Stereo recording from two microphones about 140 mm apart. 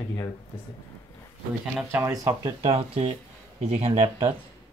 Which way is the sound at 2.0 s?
25° right (ahead or behind).